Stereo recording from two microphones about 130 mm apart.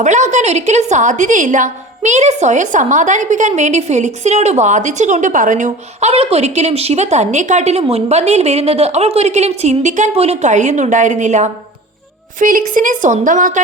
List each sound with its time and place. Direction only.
0.0 s a woman's voice: 65° right (ahead or behind)
10.1 s a woman's voice: 55° right (ahead or behind)
12.4 s a woman's voice: 90° right